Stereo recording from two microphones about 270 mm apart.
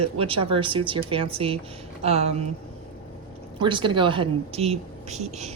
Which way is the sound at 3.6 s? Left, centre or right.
Centre.